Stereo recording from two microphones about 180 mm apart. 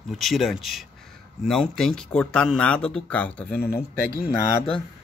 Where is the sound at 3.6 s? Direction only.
60° left (ahead or behind).